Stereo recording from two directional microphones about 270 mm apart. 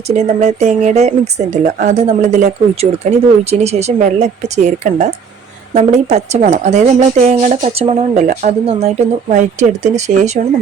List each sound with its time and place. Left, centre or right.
0.1 s speech: right